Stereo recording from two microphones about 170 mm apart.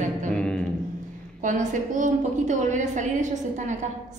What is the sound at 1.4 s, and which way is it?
A woman's voice, 50° right (ahead or behind).